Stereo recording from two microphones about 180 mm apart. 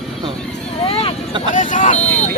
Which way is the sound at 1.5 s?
45° left (ahead or behind).